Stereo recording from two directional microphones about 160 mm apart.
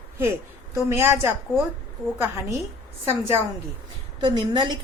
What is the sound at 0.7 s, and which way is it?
A woman's voice, 15° right (ahead or behind).